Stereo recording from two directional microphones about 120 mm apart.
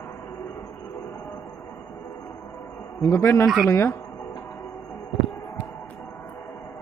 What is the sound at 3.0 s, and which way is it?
Speech, 25° left (ahead or behind).